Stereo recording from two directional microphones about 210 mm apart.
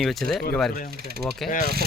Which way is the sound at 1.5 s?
40° left (ahead or behind).